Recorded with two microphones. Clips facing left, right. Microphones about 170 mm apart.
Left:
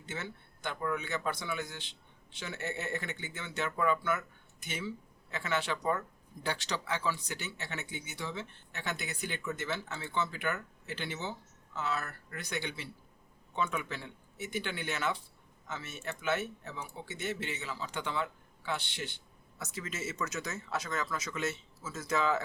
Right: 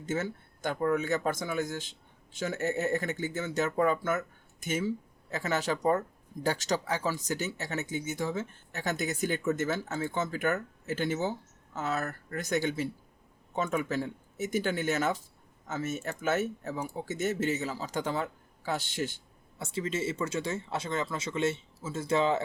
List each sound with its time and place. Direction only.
0.0 s speech: 45° right (ahead or behind)
19.5 s speech: 30° right (ahead or behind)